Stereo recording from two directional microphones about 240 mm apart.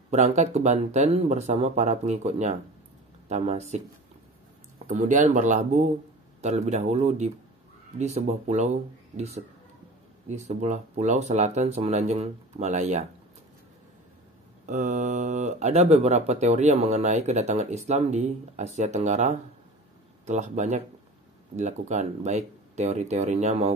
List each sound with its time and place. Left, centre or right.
0.1 s speech: right
14.7 s speech: right